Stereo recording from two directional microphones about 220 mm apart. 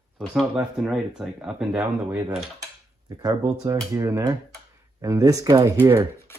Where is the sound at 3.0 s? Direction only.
15° right (ahead or behind).